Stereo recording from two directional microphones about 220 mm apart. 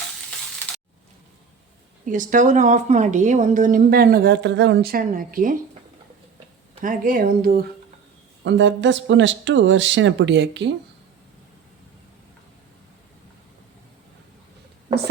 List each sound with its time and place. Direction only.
2.0 s speech: 35° right (ahead or behind)
6.8 s speech: 40° right (ahead or behind)
8.4 s speech: 55° right (ahead or behind)